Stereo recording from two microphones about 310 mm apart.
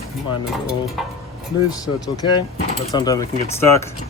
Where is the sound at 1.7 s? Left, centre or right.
Centre.